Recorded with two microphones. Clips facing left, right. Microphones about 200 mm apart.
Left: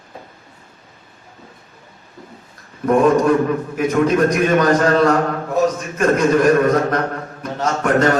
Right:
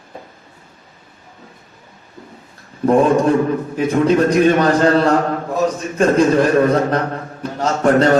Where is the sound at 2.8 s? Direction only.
30° right (ahead or behind).